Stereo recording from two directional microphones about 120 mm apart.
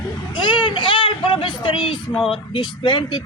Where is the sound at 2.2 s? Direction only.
Centre (ahead or behind).